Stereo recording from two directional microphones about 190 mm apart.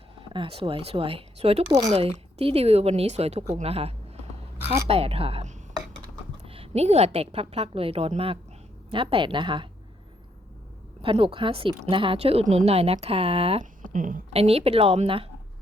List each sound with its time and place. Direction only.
0.2 s a woman's voice: 30° right (ahead or behind)
11.0 s speech: 30° right (ahead or behind)
13.8 s a woman's voice: 45° right (ahead or behind)
14.3 s speech: 30° right (ahead or behind)